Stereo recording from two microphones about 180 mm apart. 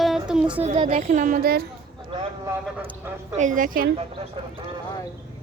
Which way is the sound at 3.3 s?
45° right (ahead or behind).